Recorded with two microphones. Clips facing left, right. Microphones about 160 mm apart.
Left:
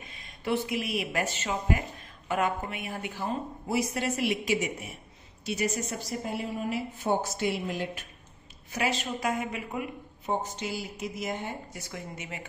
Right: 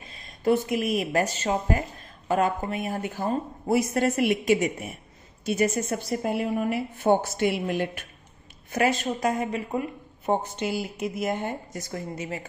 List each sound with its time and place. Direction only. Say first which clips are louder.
0.4 s a woman's voice: right 6 dB; 45° right (ahead or behind); by 8.0 s 60° right (ahead or behind)
8.7 s a woman's voice: right 6 dB; 50° right (ahead or behind)
10.2 s a woman's voice: right 6 dB; 60° right (ahead or behind); by 12.4 s 35° right (ahead or behind)